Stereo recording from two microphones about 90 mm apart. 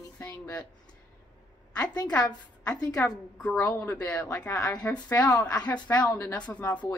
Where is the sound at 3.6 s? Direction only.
30° left (ahead or behind).